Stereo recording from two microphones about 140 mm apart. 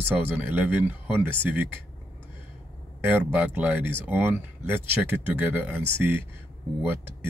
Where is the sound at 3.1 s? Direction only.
10° right (ahead or behind).